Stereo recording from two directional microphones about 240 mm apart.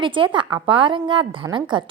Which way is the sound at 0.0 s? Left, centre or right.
Centre.